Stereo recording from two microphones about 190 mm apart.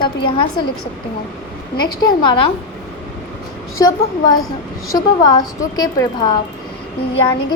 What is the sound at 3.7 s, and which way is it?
A woman's voice, 20° left (ahead or behind).